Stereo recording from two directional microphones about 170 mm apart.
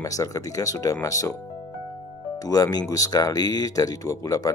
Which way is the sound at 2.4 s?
20° left (ahead or behind).